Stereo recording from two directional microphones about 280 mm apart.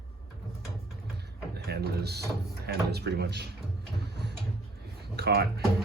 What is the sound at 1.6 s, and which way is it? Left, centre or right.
Speech, right.